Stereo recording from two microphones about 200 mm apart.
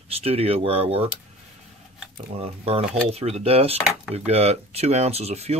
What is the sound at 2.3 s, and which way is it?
Speech, 30° right (ahead or behind).